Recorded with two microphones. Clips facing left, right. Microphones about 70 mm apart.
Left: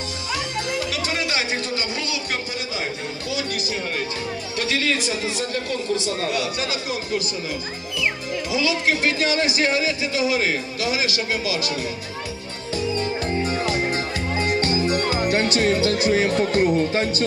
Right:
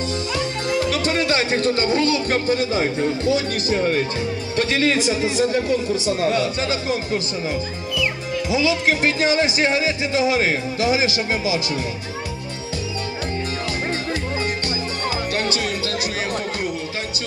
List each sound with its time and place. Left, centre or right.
0.4 s speech: right
8.5 s speech: right
14.6 s music: left
15.5 s speech: left